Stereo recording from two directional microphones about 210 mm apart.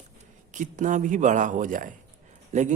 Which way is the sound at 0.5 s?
35° right (ahead or behind).